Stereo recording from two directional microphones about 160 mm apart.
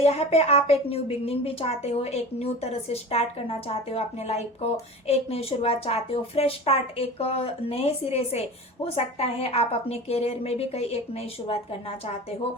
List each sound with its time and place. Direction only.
0.0 s a woman's voice: 40° left (ahead or behind)